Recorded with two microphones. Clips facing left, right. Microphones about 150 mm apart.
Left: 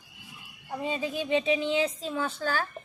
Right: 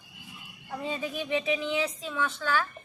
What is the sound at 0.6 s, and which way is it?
Female singing, 20° left (ahead or behind).